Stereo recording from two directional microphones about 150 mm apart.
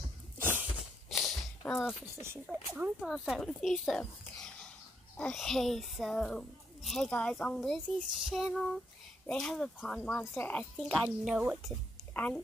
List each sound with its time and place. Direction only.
0.4 s sneeze: 15° right (ahead or behind)
1.1 s a sound: centre (ahead or behind)
2.1 s a child's voice: 15° right (ahead or behind); by 10.9 s 10° left (ahead or behind)
11.2 s a child's voice: 5° right (ahead or behind)
12.1 s a woman's voice: 10° left (ahead or behind)